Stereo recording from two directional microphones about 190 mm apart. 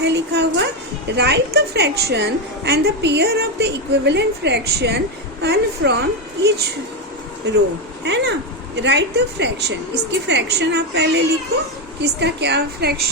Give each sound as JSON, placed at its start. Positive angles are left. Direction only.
{"t": 0.0, "sound": "a woman's voice", "side_deg": -65}
{"t": 7.4, "sound": "a woman's voice", "side_deg": -60}